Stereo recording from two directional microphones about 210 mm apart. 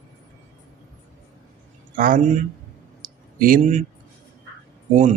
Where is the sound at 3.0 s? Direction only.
40° right (ahead or behind).